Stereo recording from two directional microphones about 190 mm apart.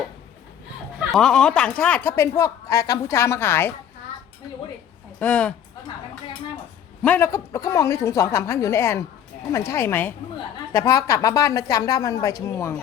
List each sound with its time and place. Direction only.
1.1 s speech: centre (ahead or behind)
5.2 s speech: 5° left (ahead or behind)
7.0 s speech: 10° left (ahead or behind)